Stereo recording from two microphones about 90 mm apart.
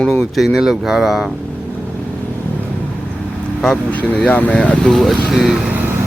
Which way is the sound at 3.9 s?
15° left (ahead or behind).